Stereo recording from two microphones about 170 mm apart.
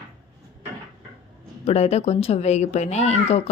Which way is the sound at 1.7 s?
40° left (ahead or behind).